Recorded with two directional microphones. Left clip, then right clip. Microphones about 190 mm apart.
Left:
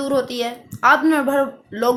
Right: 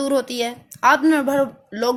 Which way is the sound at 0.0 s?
50° right (ahead or behind).